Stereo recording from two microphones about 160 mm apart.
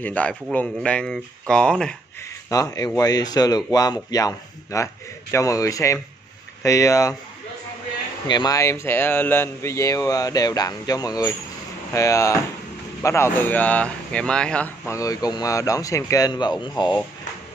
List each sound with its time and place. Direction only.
0.0 s speech: 10° left (ahead or behind)
2.5 s speech: 20° left (ahead or behind)
8.3 s speech: 25° left (ahead or behind); by 14.7 s 5° left (ahead or behind)
14.9 s speech: 20° left (ahead or behind)